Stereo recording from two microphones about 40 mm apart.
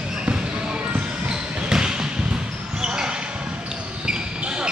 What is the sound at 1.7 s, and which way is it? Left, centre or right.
Basketball bounce, centre.